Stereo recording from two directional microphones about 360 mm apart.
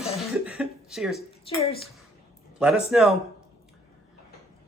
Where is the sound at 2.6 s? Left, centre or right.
Centre.